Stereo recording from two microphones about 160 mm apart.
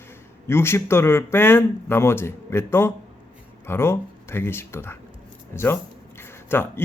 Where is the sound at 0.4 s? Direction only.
15° left (ahead or behind).